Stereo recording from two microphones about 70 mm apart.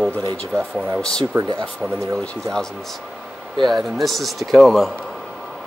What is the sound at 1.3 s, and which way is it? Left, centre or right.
Speech, right.